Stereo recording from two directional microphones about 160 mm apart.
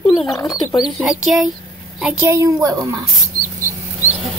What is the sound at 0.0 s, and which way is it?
A woman's voice, centre (ahead or behind).